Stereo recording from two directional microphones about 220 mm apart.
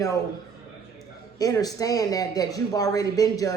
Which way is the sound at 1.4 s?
15° left (ahead or behind).